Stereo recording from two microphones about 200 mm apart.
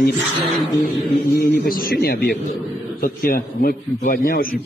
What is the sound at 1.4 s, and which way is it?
A man's voice, 50° left (ahead or behind).